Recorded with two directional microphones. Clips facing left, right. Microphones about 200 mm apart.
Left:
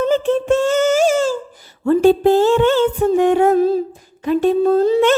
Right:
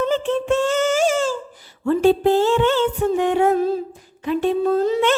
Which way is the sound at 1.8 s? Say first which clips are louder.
Left 4 dB; 45° left (ahead or behind).